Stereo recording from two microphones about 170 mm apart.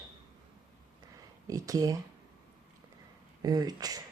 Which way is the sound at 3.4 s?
20° right (ahead or behind).